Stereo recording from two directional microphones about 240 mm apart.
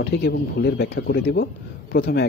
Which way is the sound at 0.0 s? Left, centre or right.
Left.